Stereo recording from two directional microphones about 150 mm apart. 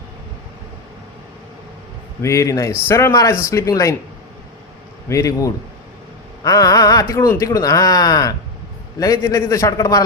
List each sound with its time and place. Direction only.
2.2 s speech: 20° left (ahead or behind)
5.0 s speech: 20° left (ahead or behind)